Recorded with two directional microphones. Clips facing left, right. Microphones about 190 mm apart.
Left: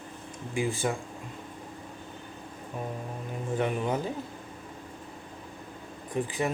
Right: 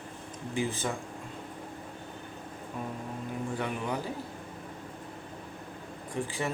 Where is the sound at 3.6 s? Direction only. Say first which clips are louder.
Left 8 dB; 20° left (ahead or behind).